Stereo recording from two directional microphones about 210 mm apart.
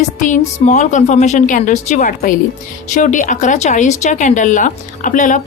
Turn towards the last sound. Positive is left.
turn(degrees=40)  # may be behind; listen again after turning